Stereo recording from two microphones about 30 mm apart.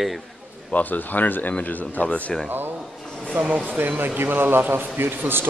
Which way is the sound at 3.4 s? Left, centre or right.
Right.